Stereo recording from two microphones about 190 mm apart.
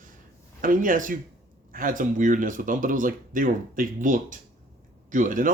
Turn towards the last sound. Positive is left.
turn(degrees=-45)  # may be behind; listen again after turning